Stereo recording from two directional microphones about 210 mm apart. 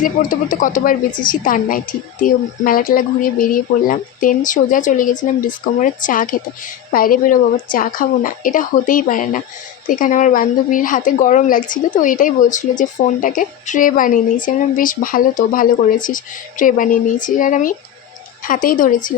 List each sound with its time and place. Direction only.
0.0 s a woman's voice: 40° left (ahead or behind)